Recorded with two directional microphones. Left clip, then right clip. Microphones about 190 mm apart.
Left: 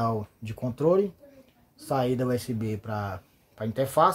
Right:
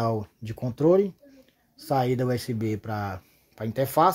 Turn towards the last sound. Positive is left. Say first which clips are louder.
# right 1 dB
turn(degrees=-30)  # may be behind; listen again after turning